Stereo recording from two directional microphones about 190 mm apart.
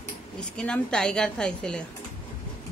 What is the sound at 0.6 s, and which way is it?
A woman's voice, 5° left (ahead or behind).